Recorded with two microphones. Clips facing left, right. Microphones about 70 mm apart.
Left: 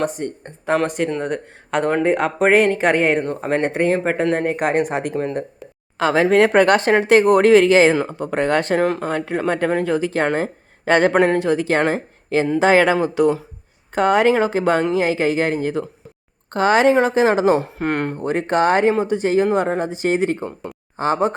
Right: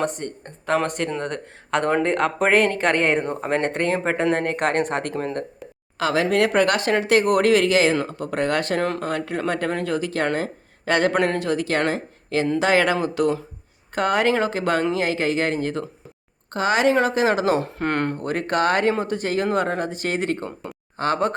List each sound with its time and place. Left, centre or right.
0.0 s speech: centre
6.0 s speech: left
8.8 s speech: centre
9.0 s speech: left
16.5 s speech: left
16.9 s speech: left
17.6 s speech: centre
18.2 s speech: left